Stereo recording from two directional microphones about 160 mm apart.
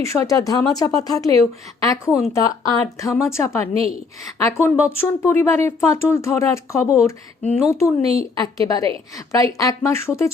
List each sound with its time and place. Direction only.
0.0 s speech: 20° left (ahead or behind)